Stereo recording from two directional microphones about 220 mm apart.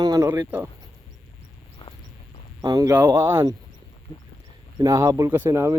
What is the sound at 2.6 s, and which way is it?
Speech, 15° right (ahead or behind).